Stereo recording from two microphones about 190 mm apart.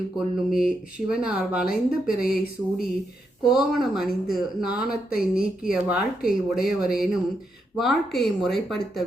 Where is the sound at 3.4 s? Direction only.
Centre (ahead or behind).